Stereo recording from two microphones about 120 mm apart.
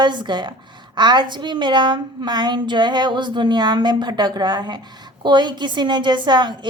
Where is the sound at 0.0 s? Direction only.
40° right (ahead or behind).